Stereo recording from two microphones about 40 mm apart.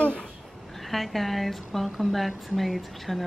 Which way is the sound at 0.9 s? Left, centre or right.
Centre.